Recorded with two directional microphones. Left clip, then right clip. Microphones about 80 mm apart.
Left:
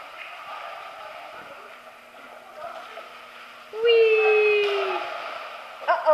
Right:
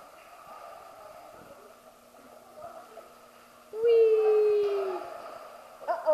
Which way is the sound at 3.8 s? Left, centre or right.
Left.